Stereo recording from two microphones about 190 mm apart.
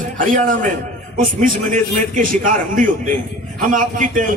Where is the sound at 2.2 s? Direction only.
45° right (ahead or behind).